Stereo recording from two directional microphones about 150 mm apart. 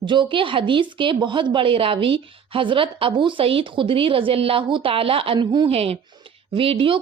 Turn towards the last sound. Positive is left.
turn(degrees=-35)  # may be behind; listen again after turning